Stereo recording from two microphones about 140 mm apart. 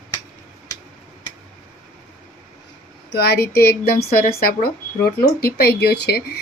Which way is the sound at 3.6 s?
90° left.